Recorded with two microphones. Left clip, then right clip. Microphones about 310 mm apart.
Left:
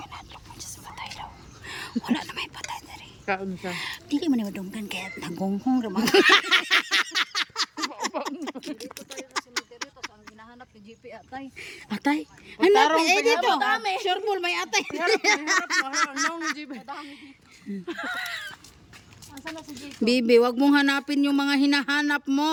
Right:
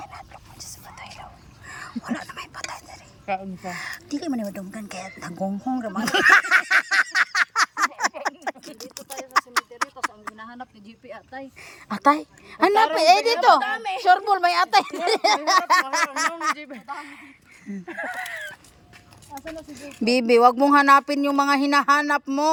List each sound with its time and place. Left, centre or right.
0.0 s whispering: centre
3.2 s speech: centre
3.8 s speech: centre
5.4 s a sound: centre
11.3 s speech: centre
13.7 s speech: centre
14.1 s speech: centre
19.7 s speech: centre